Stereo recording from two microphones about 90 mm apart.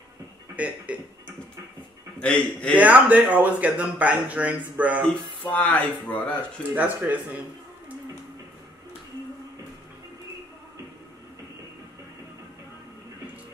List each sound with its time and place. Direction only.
0.6 s speech: 15° right (ahead or behind)
2.1 s speech: 10° left (ahead or behind)
2.8 s speech: 15° right (ahead or behind)
5.0 s speech: 15° left (ahead or behind)
6.7 s speech: 15° right (ahead or behind)